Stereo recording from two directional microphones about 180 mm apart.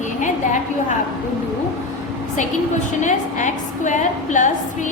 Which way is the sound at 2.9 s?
45° left (ahead or behind).